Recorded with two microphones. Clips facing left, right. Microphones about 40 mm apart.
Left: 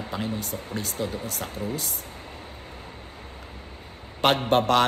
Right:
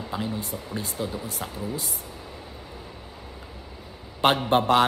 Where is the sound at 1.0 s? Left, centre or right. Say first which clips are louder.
Left 1 dB; left.